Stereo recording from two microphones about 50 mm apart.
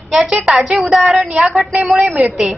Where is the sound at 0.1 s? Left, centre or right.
Centre.